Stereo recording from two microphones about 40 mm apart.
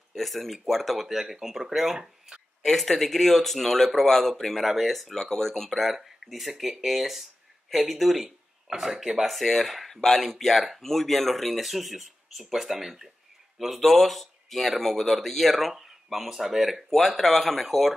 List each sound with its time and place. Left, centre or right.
0.1 s speech: centre
2.6 s speech: centre
8.9 s speech: centre
9.2 s speech: centre
13.7 s speech: centre